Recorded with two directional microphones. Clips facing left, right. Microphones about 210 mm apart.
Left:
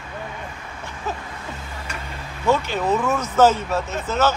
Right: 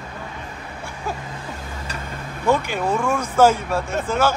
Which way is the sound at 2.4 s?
15° right (ahead or behind).